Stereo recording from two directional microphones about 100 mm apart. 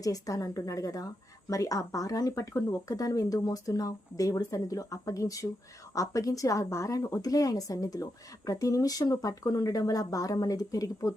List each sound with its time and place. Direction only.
0.0 s a woman's voice: 35° left (ahead or behind)